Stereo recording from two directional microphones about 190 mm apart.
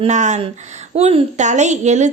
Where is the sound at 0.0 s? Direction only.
40° right (ahead or behind).